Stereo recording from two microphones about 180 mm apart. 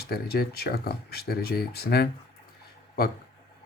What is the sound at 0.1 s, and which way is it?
Speech, 60° left (ahead or behind).